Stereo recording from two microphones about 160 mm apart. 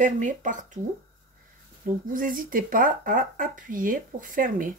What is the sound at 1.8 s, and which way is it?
Speech, 55° right (ahead or behind).